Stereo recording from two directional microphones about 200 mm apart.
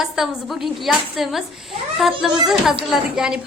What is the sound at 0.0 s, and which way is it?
A woman's voice, centre (ahead or behind).